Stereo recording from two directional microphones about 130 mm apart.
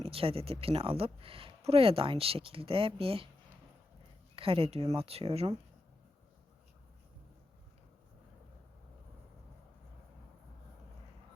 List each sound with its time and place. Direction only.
0.0 s speech: 45° right (ahead or behind)
4.4 s speech: 45° right (ahead or behind)